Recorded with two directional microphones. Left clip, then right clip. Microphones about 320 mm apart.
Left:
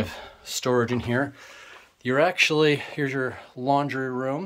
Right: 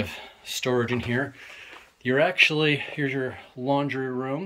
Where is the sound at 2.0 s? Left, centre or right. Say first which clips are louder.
Right 1 dB; centre.